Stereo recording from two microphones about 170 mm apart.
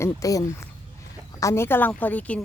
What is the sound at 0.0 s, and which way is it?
Speech, 20° left (ahead or behind).